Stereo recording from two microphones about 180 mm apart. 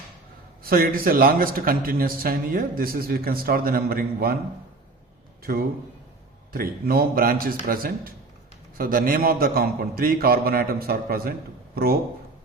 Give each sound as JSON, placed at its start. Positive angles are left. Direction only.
{"t": 0.6, "sound": "a man's voice", "side_deg": -55}
{"t": 5.4, "sound": "a sound", "side_deg": -55}
{"t": 6.5, "sound": "a man's voice", "side_deg": -55}